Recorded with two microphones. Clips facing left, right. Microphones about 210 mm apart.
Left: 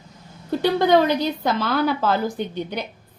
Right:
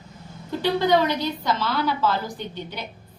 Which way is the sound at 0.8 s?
50° left (ahead or behind).